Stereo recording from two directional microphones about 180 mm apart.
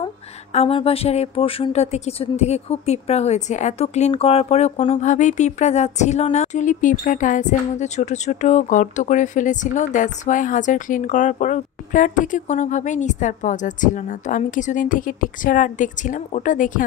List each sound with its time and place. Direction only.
0.0 s speech: 35° left (ahead or behind)